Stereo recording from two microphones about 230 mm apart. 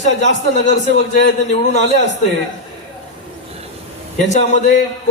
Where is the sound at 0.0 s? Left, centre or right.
Left.